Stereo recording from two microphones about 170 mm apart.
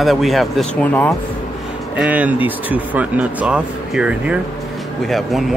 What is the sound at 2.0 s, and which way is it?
Speech, 10° right (ahead or behind).